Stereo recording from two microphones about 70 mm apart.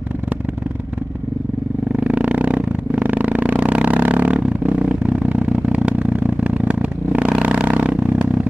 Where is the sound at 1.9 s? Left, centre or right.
Right.